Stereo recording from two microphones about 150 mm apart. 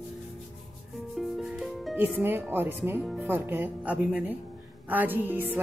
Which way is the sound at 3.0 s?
5° right (ahead or behind).